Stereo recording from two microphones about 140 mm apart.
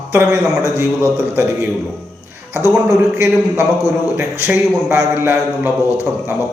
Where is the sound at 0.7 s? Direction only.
15° right (ahead or behind).